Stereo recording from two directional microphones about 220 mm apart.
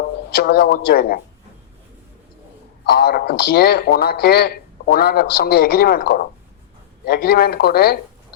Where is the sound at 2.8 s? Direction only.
45° left (ahead or behind).